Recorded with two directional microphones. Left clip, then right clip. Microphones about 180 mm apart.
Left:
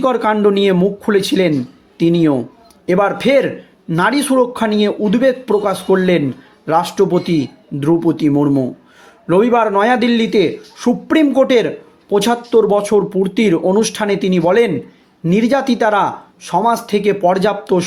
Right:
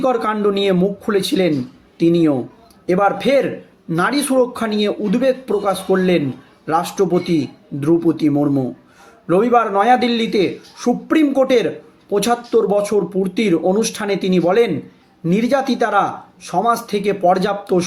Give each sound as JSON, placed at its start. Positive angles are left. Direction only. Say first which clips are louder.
{"t": 0.0, "sound": "a man's voice", "louder": "left 3 dB", "side_deg": 35}